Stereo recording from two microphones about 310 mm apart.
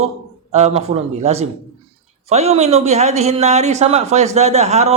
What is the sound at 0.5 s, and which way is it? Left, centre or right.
Speech, centre.